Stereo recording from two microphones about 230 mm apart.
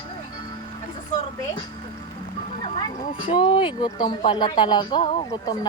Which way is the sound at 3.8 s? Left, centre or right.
Centre.